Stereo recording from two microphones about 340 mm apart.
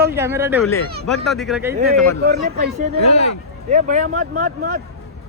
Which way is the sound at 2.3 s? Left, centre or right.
Right.